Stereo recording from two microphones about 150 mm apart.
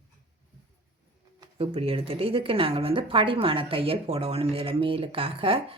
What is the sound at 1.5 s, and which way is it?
Speech, 40° right (ahead or behind).